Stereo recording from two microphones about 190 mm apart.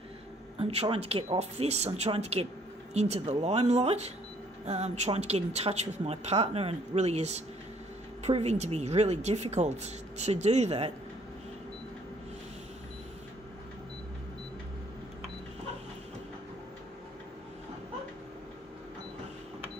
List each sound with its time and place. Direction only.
0.6 s speech: 30° right (ahead or behind)